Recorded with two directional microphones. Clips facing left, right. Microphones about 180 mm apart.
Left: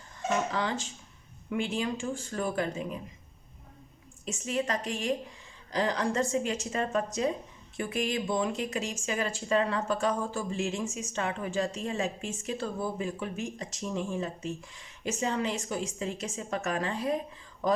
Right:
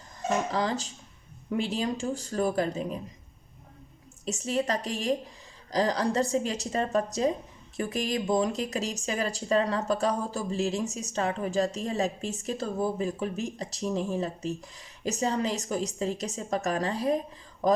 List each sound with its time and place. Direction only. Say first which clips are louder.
0.2 s speech: right 2 dB; 40° right (ahead or behind)
4.3 s speech: right 3 dB; 35° right (ahead or behind)